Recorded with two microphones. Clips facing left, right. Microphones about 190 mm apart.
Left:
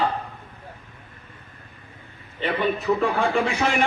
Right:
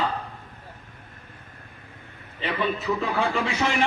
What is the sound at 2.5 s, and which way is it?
Speech, 50° left (ahead or behind).